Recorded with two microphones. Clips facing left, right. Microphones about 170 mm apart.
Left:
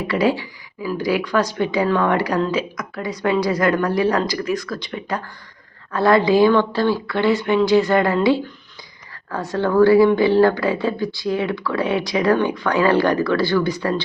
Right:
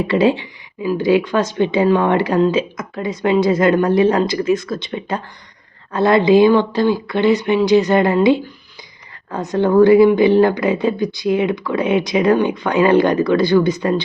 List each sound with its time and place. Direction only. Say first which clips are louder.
0.1 s speech: right 3 dB; 25° right (ahead or behind)